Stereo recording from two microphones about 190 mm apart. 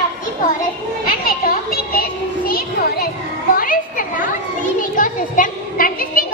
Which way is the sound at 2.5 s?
55° left (ahead or behind).